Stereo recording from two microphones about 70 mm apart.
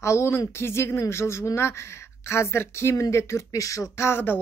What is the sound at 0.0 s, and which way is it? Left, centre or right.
A woman's voice, left.